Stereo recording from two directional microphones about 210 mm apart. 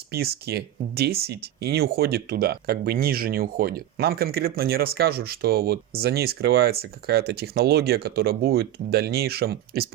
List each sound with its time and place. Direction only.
0.1 s speech: 50° right (ahead or behind)